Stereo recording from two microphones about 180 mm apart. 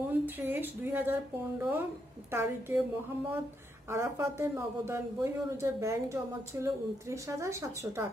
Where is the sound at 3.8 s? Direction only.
15° right (ahead or behind).